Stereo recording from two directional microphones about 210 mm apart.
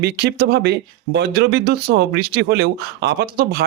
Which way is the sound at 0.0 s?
50° right (ahead or behind).